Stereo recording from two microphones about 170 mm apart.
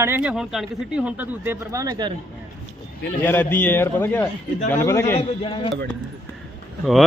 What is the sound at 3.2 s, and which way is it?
A man's voice, 10° left (ahead or behind).